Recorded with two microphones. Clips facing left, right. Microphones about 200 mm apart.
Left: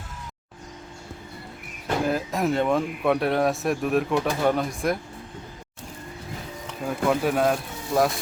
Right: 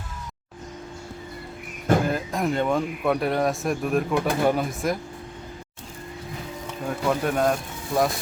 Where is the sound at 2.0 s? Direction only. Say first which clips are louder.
Left 1 dB; centre (ahead or behind).